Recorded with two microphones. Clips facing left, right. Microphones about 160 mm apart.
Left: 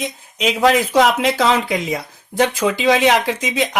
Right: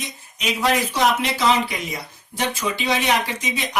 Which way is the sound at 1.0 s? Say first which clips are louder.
Left 4 dB; 90° left.